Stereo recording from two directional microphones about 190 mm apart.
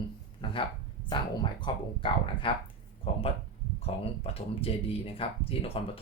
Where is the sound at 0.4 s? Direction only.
25° left (ahead or behind).